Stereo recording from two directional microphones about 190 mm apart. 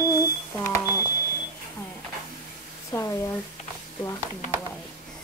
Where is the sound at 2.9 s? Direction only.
15° left (ahead or behind).